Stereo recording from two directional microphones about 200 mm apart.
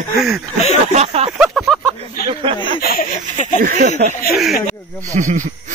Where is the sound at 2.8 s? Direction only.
45° left (ahead or behind).